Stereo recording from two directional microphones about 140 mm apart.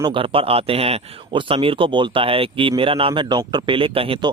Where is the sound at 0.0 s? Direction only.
35° right (ahead or behind).